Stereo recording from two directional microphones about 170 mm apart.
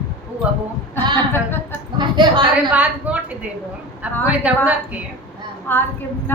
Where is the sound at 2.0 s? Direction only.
25° right (ahead or behind).